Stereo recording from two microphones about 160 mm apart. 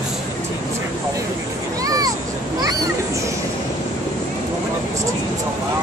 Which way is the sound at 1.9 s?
25° right (ahead or behind).